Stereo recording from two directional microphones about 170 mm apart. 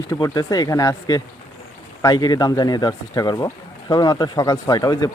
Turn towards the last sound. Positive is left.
turn(degrees=25)  # may be behind; listen again after turning